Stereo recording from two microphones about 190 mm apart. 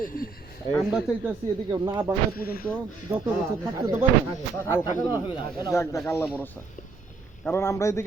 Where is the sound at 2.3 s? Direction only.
50° left (ahead or behind).